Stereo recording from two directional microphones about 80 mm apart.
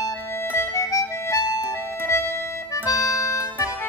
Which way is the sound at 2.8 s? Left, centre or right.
Left.